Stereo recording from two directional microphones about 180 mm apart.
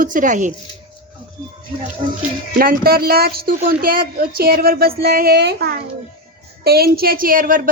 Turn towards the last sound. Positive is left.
turn(degrees=-50)  # may be behind; listen again after turning